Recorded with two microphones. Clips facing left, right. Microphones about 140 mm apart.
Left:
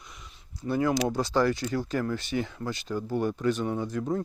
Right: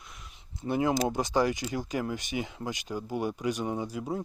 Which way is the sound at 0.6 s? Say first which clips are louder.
Left 1 dB; 20° right (ahead or behind).